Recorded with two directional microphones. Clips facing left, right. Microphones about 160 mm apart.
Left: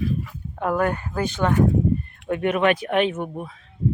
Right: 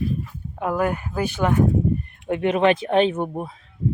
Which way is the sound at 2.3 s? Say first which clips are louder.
Right 2 dB; 25° right (ahead or behind).